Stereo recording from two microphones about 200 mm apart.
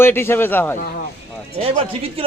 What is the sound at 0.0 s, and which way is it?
Speech, 10° left (ahead or behind).